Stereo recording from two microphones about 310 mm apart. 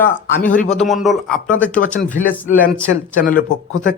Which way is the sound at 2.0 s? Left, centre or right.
Left.